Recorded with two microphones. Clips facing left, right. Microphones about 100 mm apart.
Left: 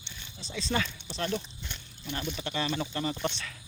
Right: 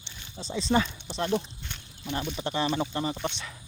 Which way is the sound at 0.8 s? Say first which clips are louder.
Right 5 dB; 15° right (ahead or behind).